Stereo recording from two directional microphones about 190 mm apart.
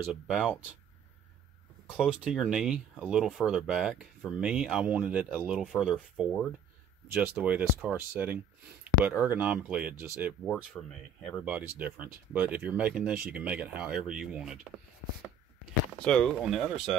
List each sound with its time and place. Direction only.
0.1 s speech: centre (ahead or behind)
1.9 s speech: 5° right (ahead or behind)
11.5 s speech: 5° right (ahead or behind)
16.0 s speech: 5° left (ahead or behind)